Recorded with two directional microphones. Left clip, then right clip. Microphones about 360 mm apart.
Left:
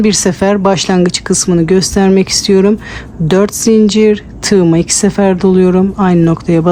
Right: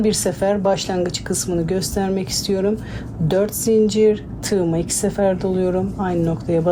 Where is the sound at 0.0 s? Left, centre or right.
Left.